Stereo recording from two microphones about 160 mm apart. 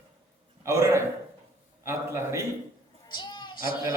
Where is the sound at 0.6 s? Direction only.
20° right (ahead or behind).